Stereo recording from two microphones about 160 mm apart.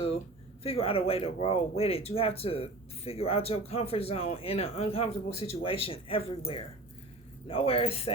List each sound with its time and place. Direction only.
0.6 s speech: 35° left (ahead or behind)
7.4 s speech: 35° left (ahead or behind)